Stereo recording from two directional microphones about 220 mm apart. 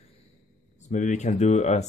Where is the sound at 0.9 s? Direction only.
35° left (ahead or behind).